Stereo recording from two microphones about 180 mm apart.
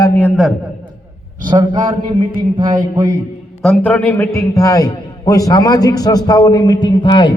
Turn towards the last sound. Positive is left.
turn(degrees=25)  # may be behind; listen again after turning